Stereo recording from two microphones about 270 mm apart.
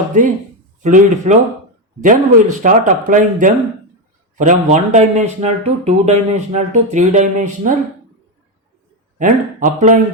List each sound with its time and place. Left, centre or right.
0.1 s speech: right
9.1 s speech: right